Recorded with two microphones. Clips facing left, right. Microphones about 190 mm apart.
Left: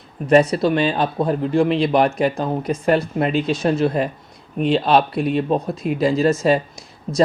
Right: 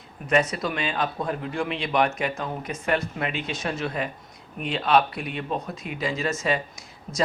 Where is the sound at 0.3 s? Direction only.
35° left (ahead or behind).